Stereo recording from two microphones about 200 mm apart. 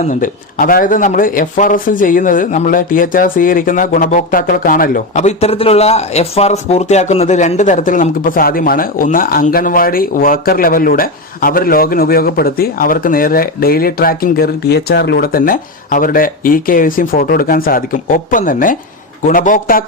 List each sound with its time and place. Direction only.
0.1 s speech: 45° left (ahead or behind)